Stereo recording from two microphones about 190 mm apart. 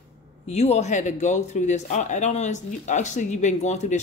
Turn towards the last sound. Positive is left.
turn(degrees=35)  # may be behind; listen again after turning